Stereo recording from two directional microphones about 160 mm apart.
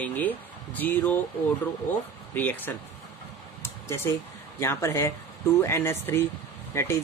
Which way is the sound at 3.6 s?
15° left (ahead or behind).